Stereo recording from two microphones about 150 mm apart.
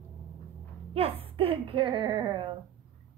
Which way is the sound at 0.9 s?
40° right (ahead or behind).